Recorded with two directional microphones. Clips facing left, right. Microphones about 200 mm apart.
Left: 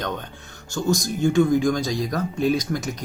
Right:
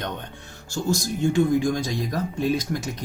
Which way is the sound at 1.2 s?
25° right (ahead or behind).